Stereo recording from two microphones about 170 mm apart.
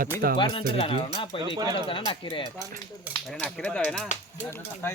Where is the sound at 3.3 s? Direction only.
5° left (ahead or behind).